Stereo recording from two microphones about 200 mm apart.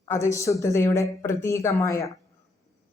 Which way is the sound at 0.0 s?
15° left (ahead or behind).